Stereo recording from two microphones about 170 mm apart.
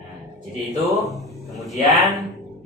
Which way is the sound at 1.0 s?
Centre (ahead or behind).